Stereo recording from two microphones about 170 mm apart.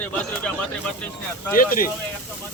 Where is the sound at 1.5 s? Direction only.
55° left (ahead or behind).